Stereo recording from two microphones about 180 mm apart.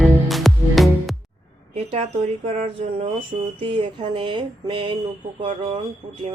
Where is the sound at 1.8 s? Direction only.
35° right (ahead or behind).